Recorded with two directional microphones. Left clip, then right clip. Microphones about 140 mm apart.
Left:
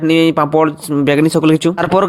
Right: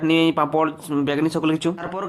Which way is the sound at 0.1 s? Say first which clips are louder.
Left 7 dB; 35° left (ahead or behind).